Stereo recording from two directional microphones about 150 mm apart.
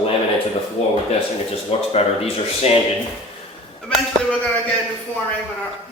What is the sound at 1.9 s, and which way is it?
Speech, 40° left (ahead or behind).